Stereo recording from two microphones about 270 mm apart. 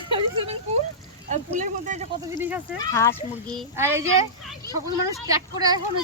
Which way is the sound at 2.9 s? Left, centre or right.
Centre.